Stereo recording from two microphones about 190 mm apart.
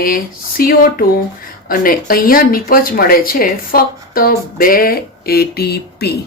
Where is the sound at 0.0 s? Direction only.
50° left (ahead or behind).